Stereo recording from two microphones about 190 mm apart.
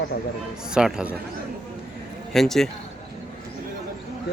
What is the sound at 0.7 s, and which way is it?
Speech, 5° right (ahead or behind).